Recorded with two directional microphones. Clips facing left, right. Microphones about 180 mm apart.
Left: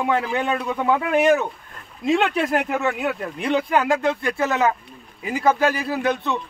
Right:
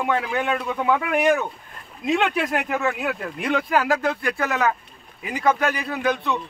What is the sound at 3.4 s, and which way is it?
Speech, 25° left (ahead or behind).